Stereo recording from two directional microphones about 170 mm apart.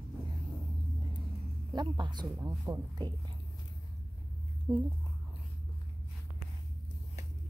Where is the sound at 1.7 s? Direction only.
25° right (ahead or behind).